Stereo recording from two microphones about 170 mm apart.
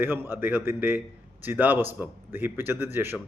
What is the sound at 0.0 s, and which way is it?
Speech, 10° right (ahead or behind).